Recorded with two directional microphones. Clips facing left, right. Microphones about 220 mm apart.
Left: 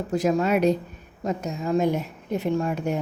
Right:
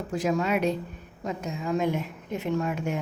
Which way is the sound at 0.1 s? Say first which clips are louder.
Left 4 dB; 40° left (ahead or behind).